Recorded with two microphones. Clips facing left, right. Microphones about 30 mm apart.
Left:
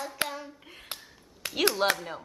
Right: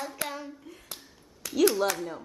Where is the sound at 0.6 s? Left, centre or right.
Left.